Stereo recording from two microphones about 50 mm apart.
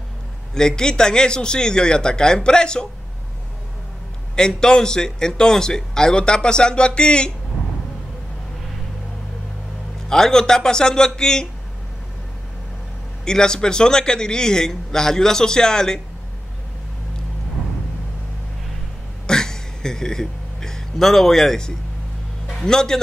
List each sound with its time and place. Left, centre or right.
0.6 s a man's voice: centre
4.4 s a man's voice: centre
10.0 s a man's voice: centre
13.2 s a man's voice: centre
19.2 s a sound: centre
22.7 s a man's voice: centre